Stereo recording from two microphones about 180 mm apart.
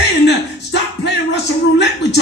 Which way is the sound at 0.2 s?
70° left (ahead or behind).